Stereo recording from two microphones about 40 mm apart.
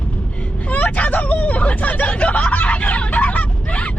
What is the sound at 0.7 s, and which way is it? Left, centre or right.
Hubbub, left.